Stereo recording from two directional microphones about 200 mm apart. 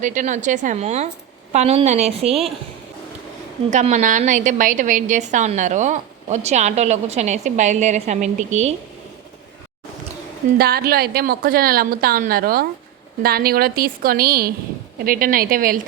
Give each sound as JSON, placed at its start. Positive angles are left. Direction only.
{"t": 0.0, "sound": "a woman's voice", "side_deg": -40}
{"t": 3.7, "sound": "a woman's voice", "side_deg": -35}
{"t": 10.6, "sound": "a woman's voice", "side_deg": -50}